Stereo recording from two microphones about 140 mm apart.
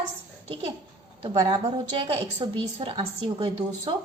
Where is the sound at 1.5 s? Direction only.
40° right (ahead or behind).